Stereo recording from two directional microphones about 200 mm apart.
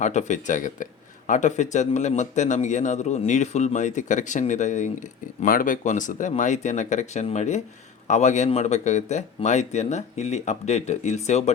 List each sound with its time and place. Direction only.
0.0 s speech: 35° left (ahead or behind)